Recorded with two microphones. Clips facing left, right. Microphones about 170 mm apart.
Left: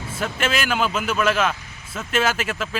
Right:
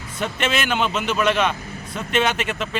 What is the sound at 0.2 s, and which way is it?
A man's voice, 5° left (ahead or behind).